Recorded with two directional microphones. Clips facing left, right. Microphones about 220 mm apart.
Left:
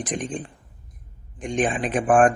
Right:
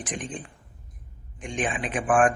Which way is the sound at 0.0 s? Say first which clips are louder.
Left 6 dB; 35° left (ahead or behind).